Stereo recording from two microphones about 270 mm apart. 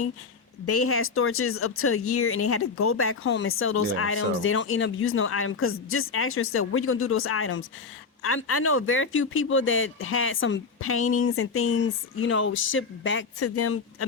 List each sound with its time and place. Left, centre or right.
0.6 s speech: left